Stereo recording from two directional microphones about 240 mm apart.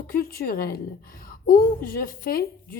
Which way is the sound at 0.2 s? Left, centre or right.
Left.